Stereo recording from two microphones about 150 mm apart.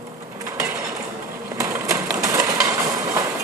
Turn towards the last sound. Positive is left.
turn(degrees=-25)  # may be behind; listen again after turning